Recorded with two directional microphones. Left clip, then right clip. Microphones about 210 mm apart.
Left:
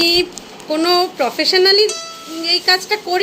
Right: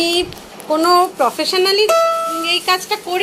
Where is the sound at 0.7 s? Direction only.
10° left (ahead or behind).